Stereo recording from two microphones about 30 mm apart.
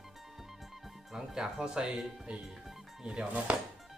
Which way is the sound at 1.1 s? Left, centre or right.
Centre.